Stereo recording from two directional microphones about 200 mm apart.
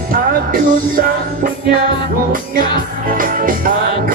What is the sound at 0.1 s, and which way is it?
Music, 45° right (ahead or behind).